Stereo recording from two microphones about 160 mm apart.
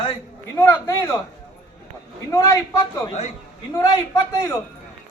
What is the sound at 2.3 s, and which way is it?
A man's voice, 20° left (ahead or behind).